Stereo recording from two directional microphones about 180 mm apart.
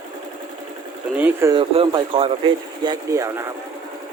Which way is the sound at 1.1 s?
10° right (ahead or behind).